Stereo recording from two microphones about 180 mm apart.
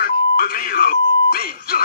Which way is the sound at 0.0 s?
55° left (ahead or behind).